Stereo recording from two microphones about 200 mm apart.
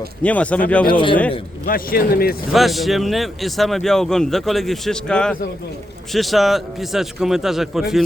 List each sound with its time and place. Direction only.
0.2 s speech: 5° left (ahead or behind)
1.6 s a man's voice: 45° left (ahead or behind)
2.5 s speech: centre (ahead or behind)